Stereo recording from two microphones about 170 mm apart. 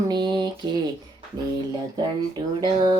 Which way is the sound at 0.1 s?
25° right (ahead or behind).